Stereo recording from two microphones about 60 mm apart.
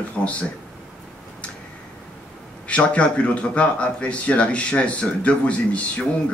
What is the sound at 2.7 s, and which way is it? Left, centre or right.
A man's voice, left.